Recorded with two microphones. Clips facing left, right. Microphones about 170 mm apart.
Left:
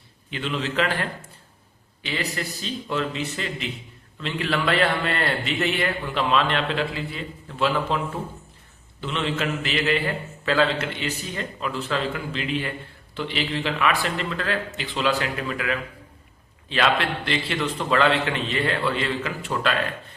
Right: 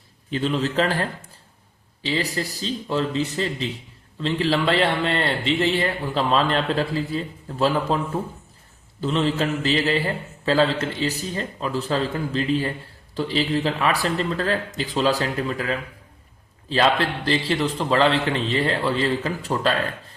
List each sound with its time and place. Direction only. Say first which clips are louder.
0.3 s a man's voice: right 5 dB; 35° right (ahead or behind)